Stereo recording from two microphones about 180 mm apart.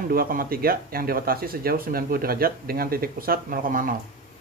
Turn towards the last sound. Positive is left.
turn(degrees=-50)  # may be behind; listen again after turning